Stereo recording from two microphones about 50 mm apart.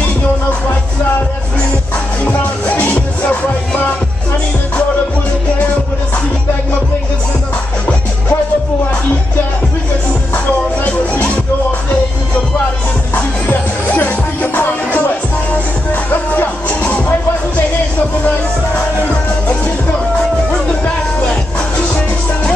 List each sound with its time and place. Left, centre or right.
2.2 s music: left
10.3 s music: left
13.1 s music: left